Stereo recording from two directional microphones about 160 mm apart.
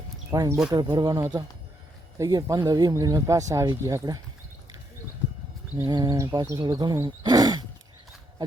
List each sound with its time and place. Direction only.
0.3 s speech: 20° right (ahead or behind)
5.7 s speech: 20° right (ahead or behind)